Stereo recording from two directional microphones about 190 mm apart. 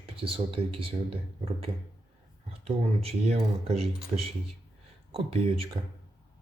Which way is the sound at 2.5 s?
30° right (ahead or behind).